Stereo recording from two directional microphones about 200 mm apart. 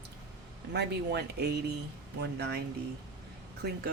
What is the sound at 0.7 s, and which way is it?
Speech, 55° right (ahead or behind).